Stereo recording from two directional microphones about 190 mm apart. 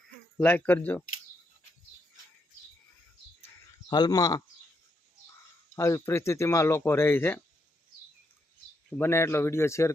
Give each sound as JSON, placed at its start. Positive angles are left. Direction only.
{"t": 0.3, "sound": "speech", "side_deg": 10}
{"t": 3.8, "sound": "speech", "side_deg": 20}
{"t": 5.7, "sound": "speech", "side_deg": 15}
{"t": 8.9, "sound": "speech", "side_deg": 10}